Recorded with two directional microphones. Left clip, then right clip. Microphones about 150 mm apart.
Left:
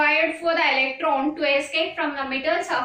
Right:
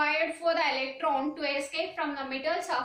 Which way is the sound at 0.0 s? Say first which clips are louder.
Left 7 dB; 35° right (ahead or behind).